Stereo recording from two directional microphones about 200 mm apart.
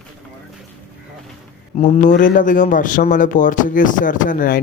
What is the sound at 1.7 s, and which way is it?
Speech, 30° left (ahead or behind).